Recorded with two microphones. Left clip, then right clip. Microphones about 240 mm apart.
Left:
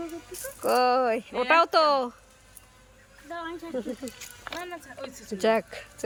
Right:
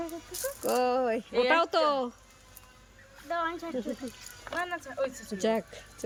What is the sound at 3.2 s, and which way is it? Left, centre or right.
Speech, centre.